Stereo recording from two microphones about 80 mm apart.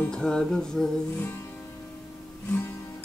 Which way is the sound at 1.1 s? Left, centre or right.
Left.